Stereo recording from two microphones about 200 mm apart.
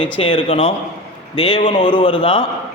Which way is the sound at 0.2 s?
30° left (ahead or behind).